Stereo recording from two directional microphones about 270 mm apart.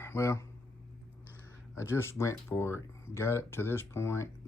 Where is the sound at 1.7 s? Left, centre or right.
Centre.